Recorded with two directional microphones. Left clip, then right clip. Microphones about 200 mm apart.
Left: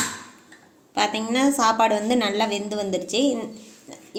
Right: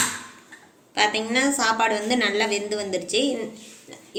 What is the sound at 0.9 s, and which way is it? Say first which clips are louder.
A woman's voice: right 1 dB; 45° left (ahead or behind).